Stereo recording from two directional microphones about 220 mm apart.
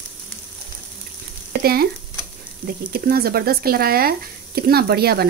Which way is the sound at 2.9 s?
45° right (ahead or behind).